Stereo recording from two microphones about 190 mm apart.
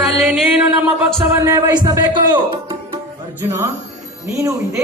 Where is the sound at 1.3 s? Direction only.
15° right (ahead or behind).